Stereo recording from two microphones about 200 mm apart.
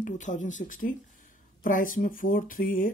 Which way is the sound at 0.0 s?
40° left (ahead or behind).